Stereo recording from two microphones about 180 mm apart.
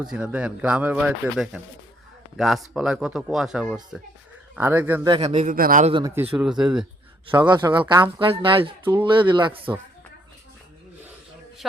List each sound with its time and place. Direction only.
0.0 s a man's voice: 5° right (ahead or behind)
5.0 s speech: 25° right (ahead or behind)
5.3 s a man's voice: 45° right (ahead or behind)
5.8 s speech: 25° right (ahead or behind)
6.3 s speech: 5° right (ahead or behind)
7.3 s speech: 25° right (ahead or behind)
11.6 s speech: centre (ahead or behind)